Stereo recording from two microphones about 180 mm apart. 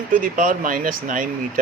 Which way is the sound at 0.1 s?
50° right (ahead or behind).